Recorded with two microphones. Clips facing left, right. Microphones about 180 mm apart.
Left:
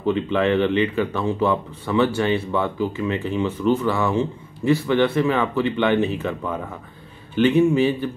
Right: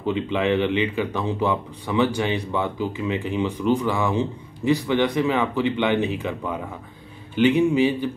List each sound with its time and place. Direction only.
0.0 s a man's voice: 15° right (ahead or behind)
7.3 s a man's voice: 15° right (ahead or behind)